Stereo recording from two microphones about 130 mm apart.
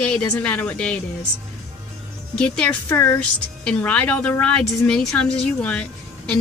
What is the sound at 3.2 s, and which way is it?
A woman's voice, 10° left (ahead or behind).